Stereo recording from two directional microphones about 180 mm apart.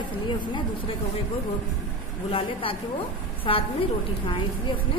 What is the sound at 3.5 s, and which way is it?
Speech, 30° left (ahead or behind).